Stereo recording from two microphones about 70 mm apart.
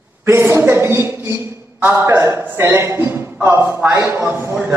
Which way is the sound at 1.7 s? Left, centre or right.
Right.